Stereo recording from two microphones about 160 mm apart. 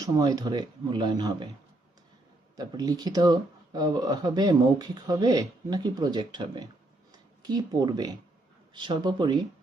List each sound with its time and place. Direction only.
0.0 s speech: 20° right (ahead or behind)
2.6 s speech: 25° right (ahead or behind)